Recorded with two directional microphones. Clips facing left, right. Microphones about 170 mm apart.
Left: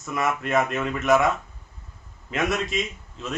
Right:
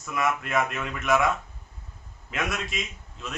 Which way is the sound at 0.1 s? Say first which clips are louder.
Left 2 dB; centre (ahead or behind).